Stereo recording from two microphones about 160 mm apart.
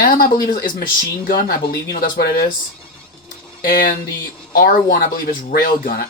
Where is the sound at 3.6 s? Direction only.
65° left (ahead or behind).